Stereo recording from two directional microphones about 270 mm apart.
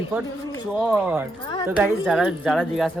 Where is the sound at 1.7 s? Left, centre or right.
Centre.